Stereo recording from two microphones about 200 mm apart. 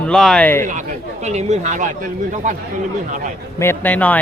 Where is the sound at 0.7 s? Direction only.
35° right (ahead or behind).